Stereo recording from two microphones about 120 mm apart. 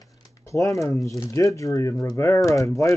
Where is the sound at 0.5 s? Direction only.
25° left (ahead or behind).